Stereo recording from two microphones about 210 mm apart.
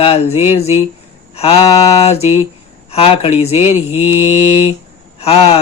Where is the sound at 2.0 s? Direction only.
30° left (ahead or behind).